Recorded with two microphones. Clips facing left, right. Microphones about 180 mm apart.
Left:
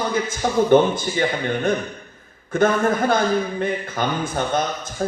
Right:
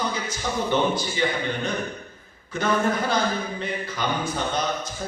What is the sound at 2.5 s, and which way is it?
A man's voice, 50° left (ahead or behind).